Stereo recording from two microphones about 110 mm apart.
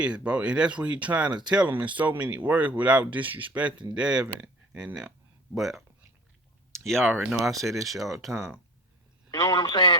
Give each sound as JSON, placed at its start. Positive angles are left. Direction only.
{"t": 0.0, "sound": "speech", "side_deg": -10}
{"t": 6.8, "sound": "speech", "side_deg": 5}
{"t": 7.1, "sound": "speech", "side_deg": -10}
{"t": 9.3, "sound": "a man's voice", "side_deg": 35}